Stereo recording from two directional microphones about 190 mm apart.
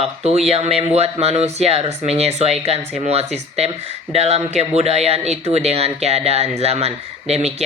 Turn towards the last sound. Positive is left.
turn(degrees=-35)  # may be behind; listen again after turning